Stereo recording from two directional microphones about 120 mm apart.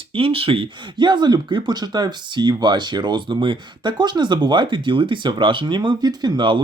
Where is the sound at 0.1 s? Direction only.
50° right (ahead or behind).